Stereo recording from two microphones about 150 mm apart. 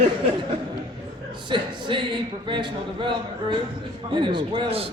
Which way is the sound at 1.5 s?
30° right (ahead or behind).